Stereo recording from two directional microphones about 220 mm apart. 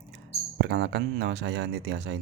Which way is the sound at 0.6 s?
50° right (ahead or behind).